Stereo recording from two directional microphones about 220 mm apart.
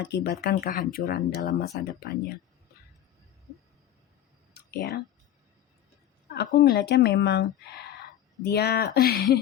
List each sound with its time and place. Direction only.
0.0 s speech: 50° left (ahead or behind)
4.5 s a sound: 45° left (ahead or behind)
6.3 s speech: 45° left (ahead or behind)